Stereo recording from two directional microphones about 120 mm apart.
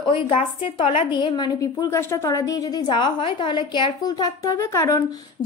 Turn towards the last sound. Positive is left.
turn(degrees=30)  # may be behind; listen again after turning